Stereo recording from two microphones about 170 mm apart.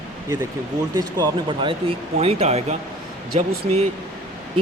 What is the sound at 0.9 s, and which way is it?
Speech, 25° right (ahead or behind).